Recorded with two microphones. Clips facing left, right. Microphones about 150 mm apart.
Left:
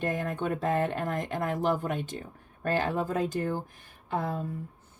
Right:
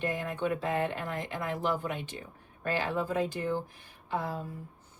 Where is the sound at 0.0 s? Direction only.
45° left (ahead or behind).